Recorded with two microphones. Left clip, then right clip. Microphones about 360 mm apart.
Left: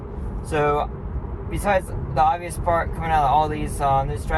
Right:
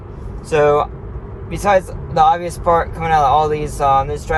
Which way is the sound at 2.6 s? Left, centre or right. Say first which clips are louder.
Right 7 dB; right.